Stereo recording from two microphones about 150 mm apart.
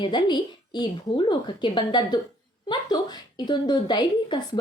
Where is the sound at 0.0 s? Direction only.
30° left (ahead or behind).